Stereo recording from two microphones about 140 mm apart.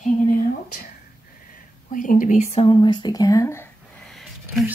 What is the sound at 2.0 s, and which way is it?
Speech, 70° left (ahead or behind).